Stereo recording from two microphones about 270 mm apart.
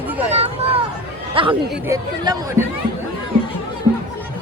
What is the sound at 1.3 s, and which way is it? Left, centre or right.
Speech, centre.